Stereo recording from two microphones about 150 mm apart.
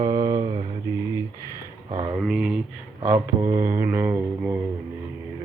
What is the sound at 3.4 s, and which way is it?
Mantra, 20° right (ahead or behind).